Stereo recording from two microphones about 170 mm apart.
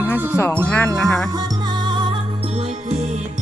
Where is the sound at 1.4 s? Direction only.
25° right (ahead or behind).